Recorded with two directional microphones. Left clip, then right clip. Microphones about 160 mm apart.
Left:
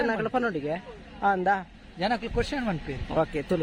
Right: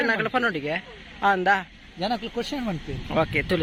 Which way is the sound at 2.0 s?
50° right (ahead or behind).